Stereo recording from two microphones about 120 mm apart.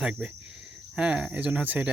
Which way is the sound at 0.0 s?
5° right (ahead or behind).